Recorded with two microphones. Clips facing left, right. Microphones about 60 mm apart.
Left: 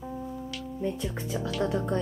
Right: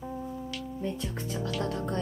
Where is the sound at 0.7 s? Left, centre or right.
Centre.